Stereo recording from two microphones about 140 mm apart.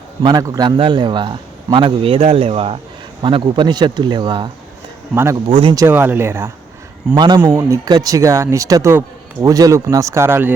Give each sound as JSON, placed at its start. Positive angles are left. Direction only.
{"t": 0.2, "sound": "a man's voice", "side_deg": -30}
{"t": 5.1, "sound": "speech", "side_deg": -20}
{"t": 5.5, "sound": "a man's voice", "side_deg": -40}
{"t": 5.7, "sound": "speech", "side_deg": -20}
{"t": 7.2, "sound": "a man's voice", "side_deg": -35}